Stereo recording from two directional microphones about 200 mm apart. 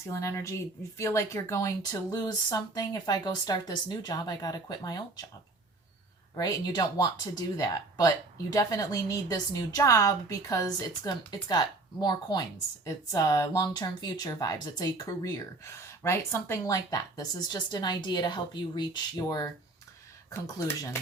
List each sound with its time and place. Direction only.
0.1 s speech: 15° left (ahead or behind)
6.3 s a woman's voice: 20° left (ahead or behind)